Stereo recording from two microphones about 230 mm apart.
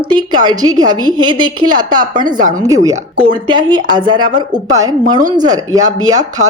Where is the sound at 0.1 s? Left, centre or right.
Centre.